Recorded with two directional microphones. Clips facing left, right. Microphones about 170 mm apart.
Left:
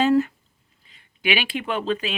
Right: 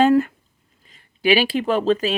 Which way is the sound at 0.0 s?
55° right (ahead or behind).